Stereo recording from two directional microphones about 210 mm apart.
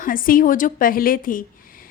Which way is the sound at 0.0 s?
40° left (ahead or behind).